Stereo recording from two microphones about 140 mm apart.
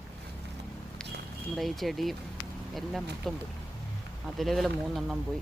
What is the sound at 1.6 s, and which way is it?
Speech, centre (ahead or behind).